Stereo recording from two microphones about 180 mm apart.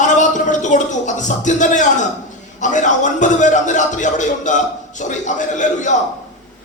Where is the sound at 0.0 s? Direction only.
45° left (ahead or behind).